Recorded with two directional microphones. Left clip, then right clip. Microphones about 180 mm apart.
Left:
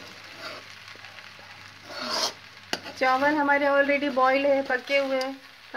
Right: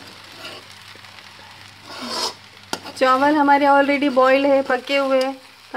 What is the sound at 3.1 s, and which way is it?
Speech, 35° right (ahead or behind).